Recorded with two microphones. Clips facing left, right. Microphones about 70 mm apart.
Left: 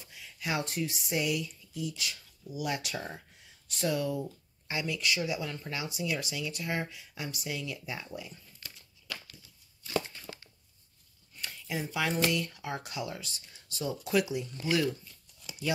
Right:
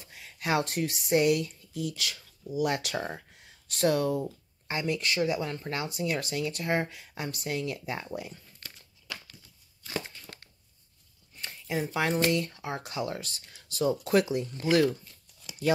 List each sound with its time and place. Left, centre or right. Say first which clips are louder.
0.1 s speech: right 6 dB; right
4.2 s speech: right 3 dB; right
11.4 s speech: right 4 dB; right
13.2 s speech: right 3 dB; right
13.7 s speech: right 5 dB; right